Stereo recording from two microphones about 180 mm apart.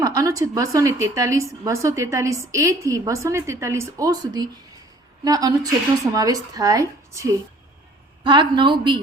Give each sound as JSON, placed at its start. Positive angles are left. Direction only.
{"t": 0.0, "sound": "a woman's voice", "side_deg": -20}